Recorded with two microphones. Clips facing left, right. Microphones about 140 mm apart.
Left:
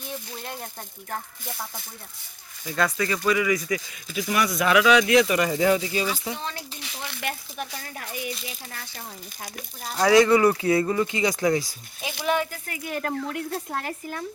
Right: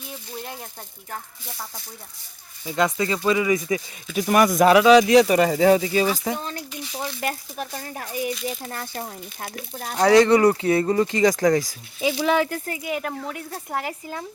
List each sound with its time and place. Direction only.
2.6 s speech: 20° right (ahead or behind)
4.1 s speech: 45° right (ahead or behind)
4.7 s speech: 35° right (ahead or behind); by 9.5 s 50° right (ahead or behind)
9.7 s speech: 40° right (ahead or behind)
12.8 s speech: 10° right (ahead or behind)